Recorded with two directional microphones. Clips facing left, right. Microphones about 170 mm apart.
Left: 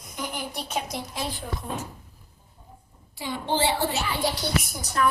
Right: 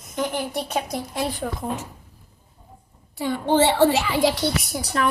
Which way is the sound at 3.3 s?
65° right (ahead or behind).